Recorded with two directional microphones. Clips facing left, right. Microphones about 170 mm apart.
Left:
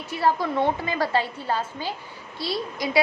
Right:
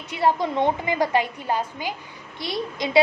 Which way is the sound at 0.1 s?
20° right (ahead or behind).